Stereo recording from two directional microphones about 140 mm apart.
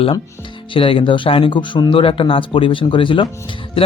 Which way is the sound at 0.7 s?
40° left (ahead or behind).